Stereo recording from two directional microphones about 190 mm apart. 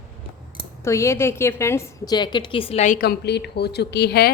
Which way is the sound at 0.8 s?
15° left (ahead or behind).